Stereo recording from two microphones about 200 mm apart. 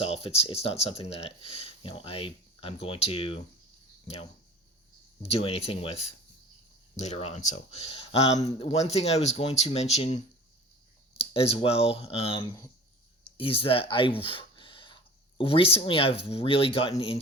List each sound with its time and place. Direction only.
0.0 s speech: 30° left (ahead or behind)
5.3 s speech: 30° left (ahead or behind)